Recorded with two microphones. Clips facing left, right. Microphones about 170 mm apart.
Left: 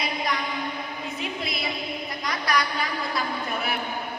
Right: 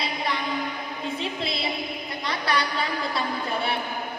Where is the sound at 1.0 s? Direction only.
30° right (ahead or behind).